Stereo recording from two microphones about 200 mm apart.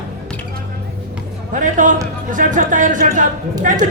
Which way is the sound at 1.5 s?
40° right (ahead or behind).